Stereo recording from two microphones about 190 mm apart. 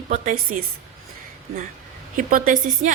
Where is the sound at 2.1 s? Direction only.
45° right (ahead or behind).